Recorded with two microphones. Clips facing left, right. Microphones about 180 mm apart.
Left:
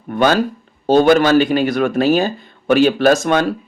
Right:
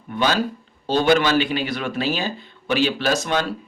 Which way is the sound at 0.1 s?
50° left (ahead or behind).